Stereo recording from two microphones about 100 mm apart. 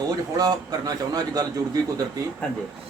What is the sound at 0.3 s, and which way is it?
A man's voice, 40° right (ahead or behind).